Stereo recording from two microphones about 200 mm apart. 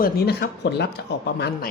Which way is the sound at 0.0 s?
50° left (ahead or behind).